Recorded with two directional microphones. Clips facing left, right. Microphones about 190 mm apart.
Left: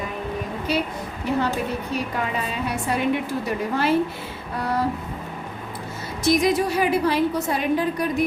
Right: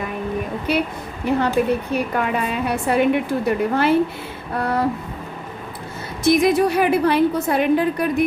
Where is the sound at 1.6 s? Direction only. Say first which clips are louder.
Right 7 dB; 60° right (ahead or behind).